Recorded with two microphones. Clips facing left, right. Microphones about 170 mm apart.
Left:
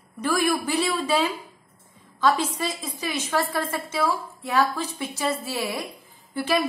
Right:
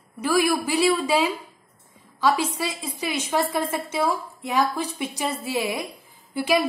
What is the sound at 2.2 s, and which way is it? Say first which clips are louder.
A woman's voice: even; 10° right (ahead or behind).